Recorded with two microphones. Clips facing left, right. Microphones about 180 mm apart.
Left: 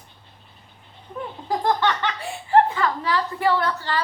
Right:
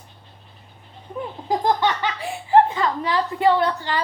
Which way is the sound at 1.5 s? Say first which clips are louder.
Right 1 dB; 10° right (ahead or behind).